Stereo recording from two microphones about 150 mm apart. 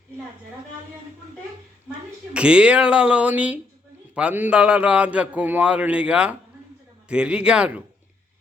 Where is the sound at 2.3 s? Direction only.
5° right (ahead or behind).